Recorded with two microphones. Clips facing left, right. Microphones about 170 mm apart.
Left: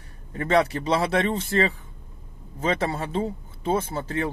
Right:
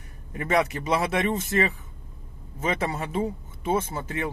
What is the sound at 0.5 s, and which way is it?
Speech, 30° left (ahead or behind).